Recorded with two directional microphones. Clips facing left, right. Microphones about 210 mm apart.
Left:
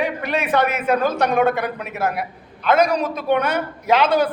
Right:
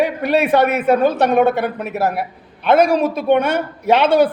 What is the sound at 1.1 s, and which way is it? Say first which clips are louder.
Speech: right 4 dB; 5° right (ahead or behind).